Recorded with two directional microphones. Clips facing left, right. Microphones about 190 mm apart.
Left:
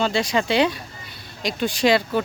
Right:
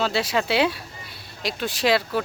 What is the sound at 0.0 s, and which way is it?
Speech, 5° right (ahead or behind).